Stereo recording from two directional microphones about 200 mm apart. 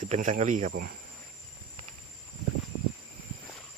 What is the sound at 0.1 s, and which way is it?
Speech, 35° right (ahead or behind).